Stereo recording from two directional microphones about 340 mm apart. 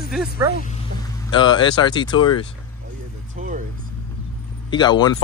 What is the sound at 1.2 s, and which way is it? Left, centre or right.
Speech, centre.